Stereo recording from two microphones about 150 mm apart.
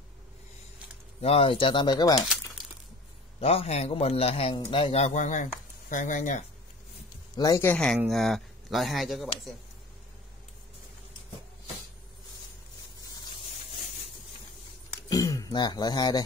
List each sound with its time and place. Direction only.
1.2 s a man's voice: 40° left (ahead or behind)
3.3 s a man's voice: 40° left (ahead or behind)
7.3 s speech: 25° left (ahead or behind)
7.6 s speech: 15° left (ahead or behind)
8.1 s speech: centre (ahead or behind)
15.0 s a sound: 25° left (ahead or behind)